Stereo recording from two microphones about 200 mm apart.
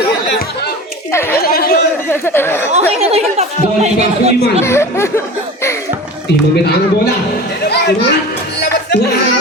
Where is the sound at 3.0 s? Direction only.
30° right (ahead or behind).